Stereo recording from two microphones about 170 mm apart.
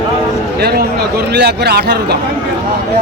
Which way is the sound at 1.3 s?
75° right (ahead or behind).